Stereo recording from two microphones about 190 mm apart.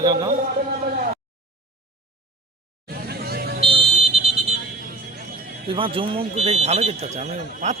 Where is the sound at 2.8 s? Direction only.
55° right (ahead or behind).